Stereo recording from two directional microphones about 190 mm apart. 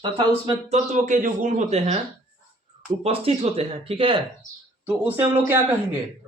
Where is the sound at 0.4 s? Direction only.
35° right (ahead or behind).